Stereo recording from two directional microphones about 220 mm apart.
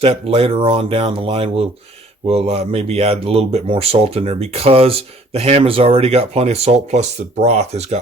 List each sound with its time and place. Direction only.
0.0 s speech: 25° right (ahead or behind)